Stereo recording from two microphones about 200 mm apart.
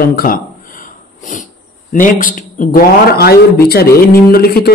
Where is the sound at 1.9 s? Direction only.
40° left (ahead or behind).